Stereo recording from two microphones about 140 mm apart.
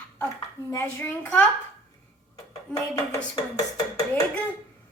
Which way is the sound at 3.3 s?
30° left (ahead or behind).